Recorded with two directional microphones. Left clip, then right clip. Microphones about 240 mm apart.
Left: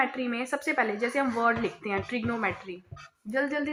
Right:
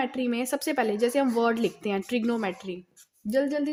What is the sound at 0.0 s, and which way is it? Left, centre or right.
A woman's voice, right.